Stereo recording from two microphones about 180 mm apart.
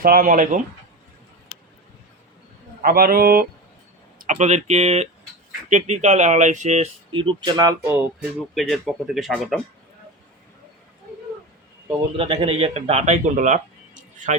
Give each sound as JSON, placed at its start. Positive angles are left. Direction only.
{"t": 0.0, "sound": "speech", "side_deg": -50}
{"t": 2.8, "sound": "speech", "side_deg": -55}
{"t": 4.3, "sound": "speech", "side_deg": -40}
{"t": 7.1, "sound": "speech", "side_deg": -25}
{"t": 8.5, "sound": "speech", "side_deg": 0}
{"t": 12.1, "sound": "speech", "side_deg": -30}